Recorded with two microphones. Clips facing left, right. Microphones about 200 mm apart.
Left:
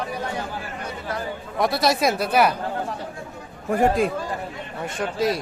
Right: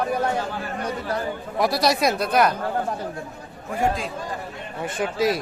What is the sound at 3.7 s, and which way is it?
Speech, 55° left (ahead or behind).